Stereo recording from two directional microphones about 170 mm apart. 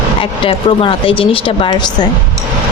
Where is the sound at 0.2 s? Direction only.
30° left (ahead or behind).